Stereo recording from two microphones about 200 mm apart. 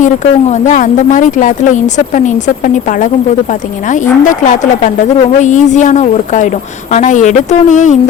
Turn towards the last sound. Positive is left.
turn(degrees=40)  # may be behind; listen again after turning